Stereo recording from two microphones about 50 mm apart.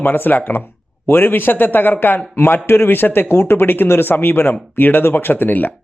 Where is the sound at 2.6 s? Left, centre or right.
Left.